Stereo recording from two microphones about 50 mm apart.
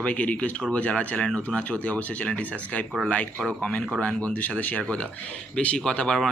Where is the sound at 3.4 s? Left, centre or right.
Centre.